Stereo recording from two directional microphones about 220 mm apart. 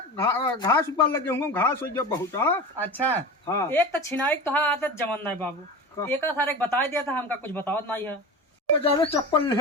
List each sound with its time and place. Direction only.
0.2 s a man's voice: 15° left (ahead or behind)
8.8 s speech: 20° left (ahead or behind)